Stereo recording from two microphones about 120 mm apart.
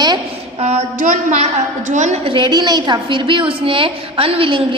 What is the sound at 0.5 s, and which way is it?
A woman's voice, 65° right (ahead or behind).